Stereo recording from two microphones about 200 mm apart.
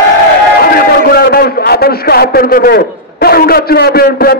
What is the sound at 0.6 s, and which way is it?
A man's voice, 50° left (ahead or behind).